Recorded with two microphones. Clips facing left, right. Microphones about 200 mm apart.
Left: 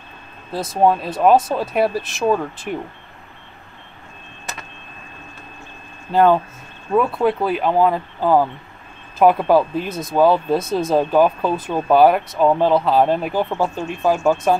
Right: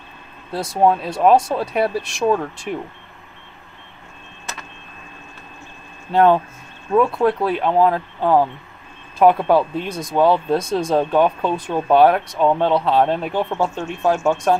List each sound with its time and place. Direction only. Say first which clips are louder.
0.5 s speech: even; centre (ahead or behind)
6.1 s speech: even; centre (ahead or behind)